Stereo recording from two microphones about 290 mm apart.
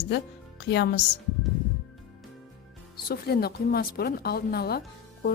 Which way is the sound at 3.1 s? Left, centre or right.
Left.